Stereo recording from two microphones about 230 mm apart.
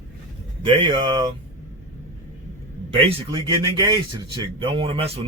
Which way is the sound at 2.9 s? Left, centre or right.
Right.